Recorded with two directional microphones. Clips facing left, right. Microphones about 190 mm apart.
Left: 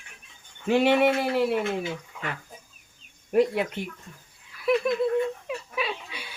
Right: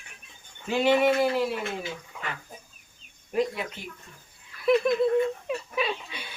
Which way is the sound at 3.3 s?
60° left (ahead or behind).